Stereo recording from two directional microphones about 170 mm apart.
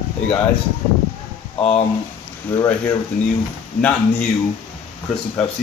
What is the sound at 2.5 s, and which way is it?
Speech, 15° left (ahead or behind).